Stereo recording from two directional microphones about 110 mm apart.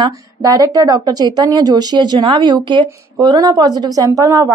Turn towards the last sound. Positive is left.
turn(degrees=-25)  # may be behind; listen again after turning